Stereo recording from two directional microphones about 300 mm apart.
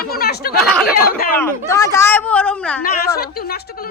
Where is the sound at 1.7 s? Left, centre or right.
Centre.